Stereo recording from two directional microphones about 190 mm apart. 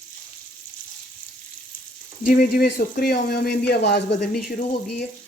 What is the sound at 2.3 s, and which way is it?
Speech, 50° left (ahead or behind).